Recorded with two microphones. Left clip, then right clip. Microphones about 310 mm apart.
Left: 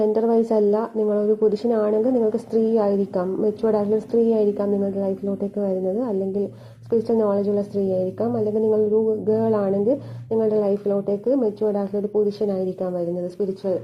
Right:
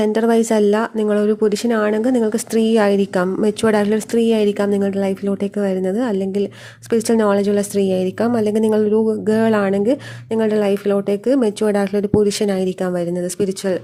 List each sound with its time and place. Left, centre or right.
0.0 s a woman's voice: right